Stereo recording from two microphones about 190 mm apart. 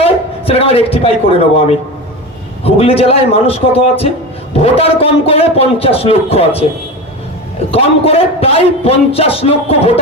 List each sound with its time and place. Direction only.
0.0 s a man's voice: 30° left (ahead or behind)
7.7 s a man's voice: 30° left (ahead or behind)